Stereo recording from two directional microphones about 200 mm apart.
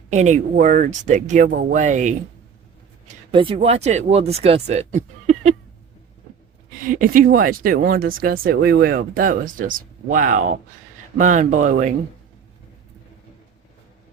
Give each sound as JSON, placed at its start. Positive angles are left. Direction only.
{"t": 0.1, "sound": "speech", "side_deg": -35}
{"t": 3.3, "sound": "speech", "side_deg": -30}
{"t": 6.8, "sound": "speech", "side_deg": -45}